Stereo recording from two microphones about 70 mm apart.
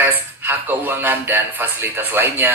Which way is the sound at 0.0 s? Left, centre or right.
Right.